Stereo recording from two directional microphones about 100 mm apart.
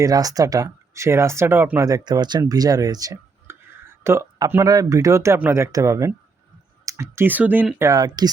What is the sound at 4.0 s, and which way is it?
Speech, 25° right (ahead or behind).